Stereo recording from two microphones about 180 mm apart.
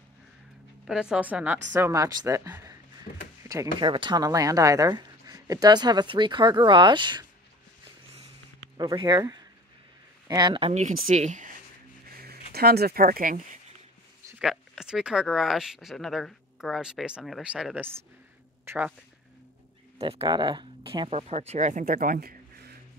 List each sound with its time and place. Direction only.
0.8 s a woman's voice: 5° right (ahead or behind); by 7.2 s 25° right (ahead or behind)
8.7 s speech: 20° right (ahead or behind)
10.7 s speech: 40° right (ahead or behind)
12.2 s speech: 60° right (ahead or behind)
14.4 s a woman's voice: centre (ahead or behind)
20.0 s speech: 30° right (ahead or behind); by 22.8 s 55° right (ahead or behind)